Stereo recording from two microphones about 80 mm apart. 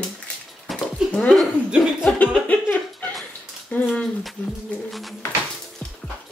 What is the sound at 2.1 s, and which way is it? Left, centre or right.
Music, centre.